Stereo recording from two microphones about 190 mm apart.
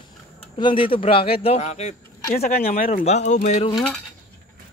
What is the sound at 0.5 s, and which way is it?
A man's voice, 25° left (ahead or behind).